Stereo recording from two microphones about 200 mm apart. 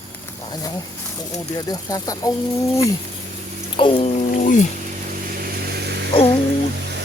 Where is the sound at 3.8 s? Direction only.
25° left (ahead or behind).